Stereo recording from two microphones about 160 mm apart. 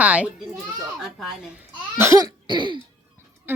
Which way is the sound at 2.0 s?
20° right (ahead or behind).